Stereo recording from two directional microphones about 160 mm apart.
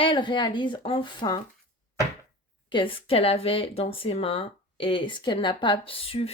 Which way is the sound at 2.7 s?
35° left (ahead or behind).